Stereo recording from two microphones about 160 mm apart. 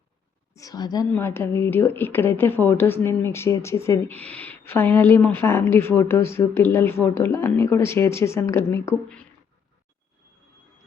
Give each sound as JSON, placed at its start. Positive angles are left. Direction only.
{"t": 0.5, "sound": "a woman's voice", "side_deg": 25}